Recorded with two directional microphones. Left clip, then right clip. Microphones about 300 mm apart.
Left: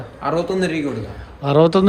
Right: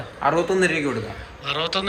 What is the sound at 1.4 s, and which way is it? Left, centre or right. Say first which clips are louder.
Speech: left 11 dB; centre.